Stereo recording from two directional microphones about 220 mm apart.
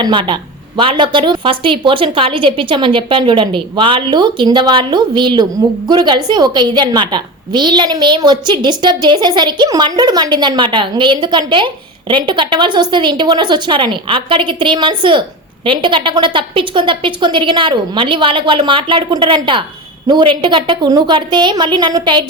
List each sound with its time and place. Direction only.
0.0 s a woman's voice: 20° right (ahead or behind)